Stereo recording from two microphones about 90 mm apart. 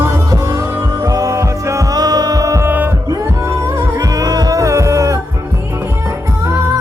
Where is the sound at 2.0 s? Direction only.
45° right (ahead or behind).